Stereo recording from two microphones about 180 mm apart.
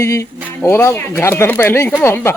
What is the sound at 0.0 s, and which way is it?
Speech, 15° left (ahead or behind).